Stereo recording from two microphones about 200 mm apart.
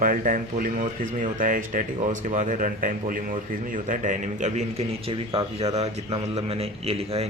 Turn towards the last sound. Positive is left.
turn(degrees=-30)  # may be behind; listen again after turning